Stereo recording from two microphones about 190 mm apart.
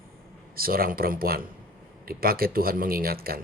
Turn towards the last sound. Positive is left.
turn(degrees=-50)  # may be behind; listen again after turning